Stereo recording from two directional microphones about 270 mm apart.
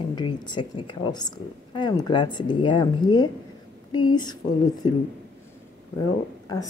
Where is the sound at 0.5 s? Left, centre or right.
Centre.